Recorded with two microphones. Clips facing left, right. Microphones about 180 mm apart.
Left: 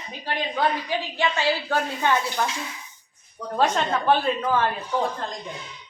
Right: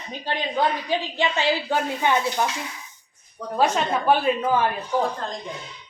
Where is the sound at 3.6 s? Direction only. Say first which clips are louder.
Right 1 dB; 10° right (ahead or behind).